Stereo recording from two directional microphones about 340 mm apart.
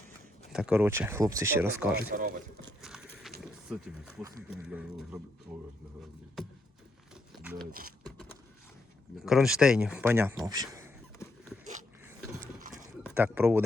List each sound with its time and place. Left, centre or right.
0.5 s speech: centre
2.0 s speech: right
2.8 s a sound: centre
3.4 s speech: centre
7.1 s horse: centre
7.7 s speech: right
9.2 s speech: centre
11.2 s a sound: centre
13.0 s a sound: centre